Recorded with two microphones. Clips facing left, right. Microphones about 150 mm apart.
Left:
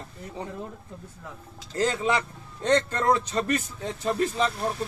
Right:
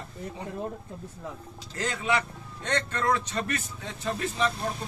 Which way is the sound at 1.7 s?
35° left (ahead or behind).